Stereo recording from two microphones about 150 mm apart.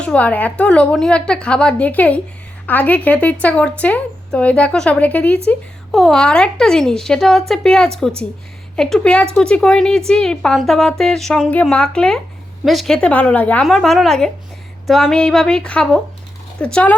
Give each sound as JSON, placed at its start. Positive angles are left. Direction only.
{"t": 0.0, "sound": "a woman's voice", "side_deg": 10}